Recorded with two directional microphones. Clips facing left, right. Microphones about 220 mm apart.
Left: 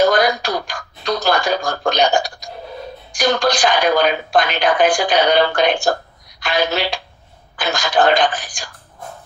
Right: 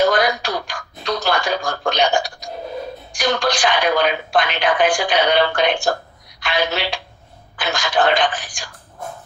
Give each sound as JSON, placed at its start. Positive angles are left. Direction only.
{"t": 0.0, "sound": "a woman's voice", "side_deg": 40}